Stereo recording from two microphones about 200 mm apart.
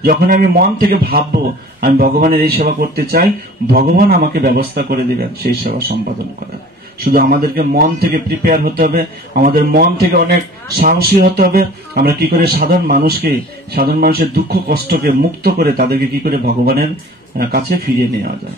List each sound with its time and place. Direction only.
0.0 s speech: 45° right (ahead or behind)
7.1 s speech: 45° right (ahead or behind)